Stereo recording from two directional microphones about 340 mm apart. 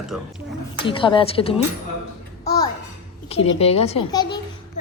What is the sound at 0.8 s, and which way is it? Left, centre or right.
Speech, centre.